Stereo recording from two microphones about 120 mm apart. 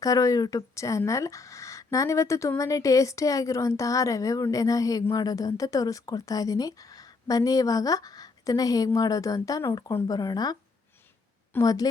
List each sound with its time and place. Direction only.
0.0 s speech: 30° left (ahead or behind)
11.6 s speech: 30° left (ahead or behind)